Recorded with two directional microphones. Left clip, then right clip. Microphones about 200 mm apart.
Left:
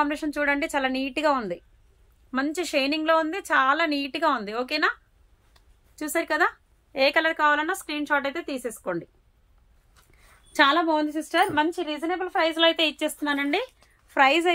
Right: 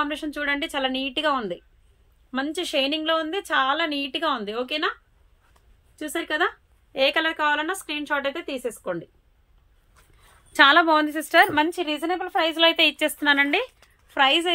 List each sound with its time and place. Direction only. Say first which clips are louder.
0.0 s a woman's voice: left 2 dB; 20° left (ahead or behind)
5.9 s a woman's voice: left 1 dB; 15° left (ahead or behind)
10.5 s a woman's voice: right 4 dB; centre (ahead or behind)
10.9 s a woman's voice: right 4 dB; 15° right (ahead or behind)
14.0 s a woman's voice: even; 15° left (ahead or behind)